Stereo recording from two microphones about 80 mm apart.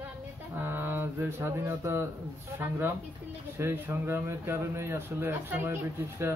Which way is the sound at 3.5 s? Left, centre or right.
Right.